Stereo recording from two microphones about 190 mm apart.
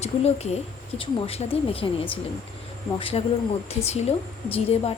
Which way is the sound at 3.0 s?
30° left (ahead or behind).